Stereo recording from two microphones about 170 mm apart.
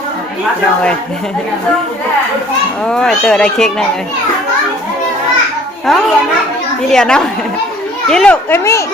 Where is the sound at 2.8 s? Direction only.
5° left (ahead or behind).